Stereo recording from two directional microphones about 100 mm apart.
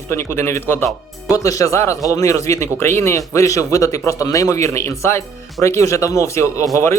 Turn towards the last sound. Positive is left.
turn(degrees=30)  # may be behind; listen again after turning